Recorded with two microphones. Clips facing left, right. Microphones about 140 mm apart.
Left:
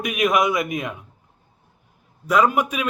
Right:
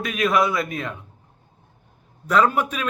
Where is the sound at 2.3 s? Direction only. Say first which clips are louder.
Left 1 dB; 10° left (ahead or behind).